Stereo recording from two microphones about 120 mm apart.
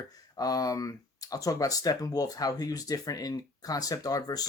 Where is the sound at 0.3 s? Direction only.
30° left (ahead or behind).